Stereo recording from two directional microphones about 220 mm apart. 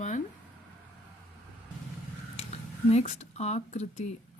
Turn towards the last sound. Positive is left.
turn(degrees=30)  # may be behind; listen again after turning